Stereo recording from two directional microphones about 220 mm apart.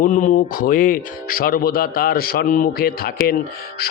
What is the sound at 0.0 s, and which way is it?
Speech, 35° left (ahead or behind).